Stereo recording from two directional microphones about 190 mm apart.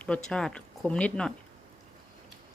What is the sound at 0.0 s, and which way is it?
Speech, 5° left (ahead or behind).